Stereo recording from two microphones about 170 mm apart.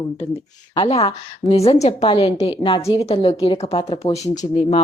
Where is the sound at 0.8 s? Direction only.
35° left (ahead or behind).